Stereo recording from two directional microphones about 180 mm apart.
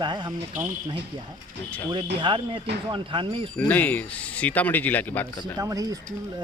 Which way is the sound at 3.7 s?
10° left (ahead or behind).